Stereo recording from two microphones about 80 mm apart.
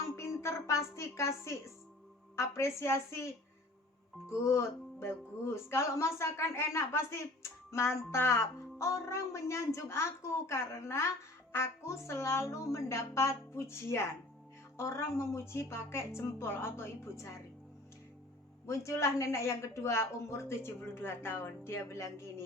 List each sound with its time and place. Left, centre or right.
0.0 s a woman's voice: left
4.3 s speech: left
18.6 s speech: left